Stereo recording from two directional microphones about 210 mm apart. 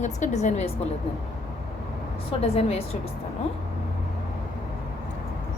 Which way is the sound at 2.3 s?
30° left (ahead or behind).